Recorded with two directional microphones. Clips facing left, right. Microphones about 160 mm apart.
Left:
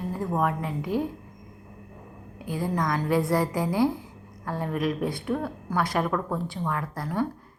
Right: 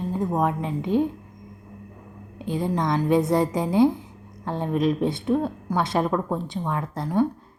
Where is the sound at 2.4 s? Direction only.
25° right (ahead or behind).